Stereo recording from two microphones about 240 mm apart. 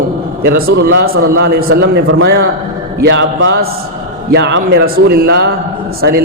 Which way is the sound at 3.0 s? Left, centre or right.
Right.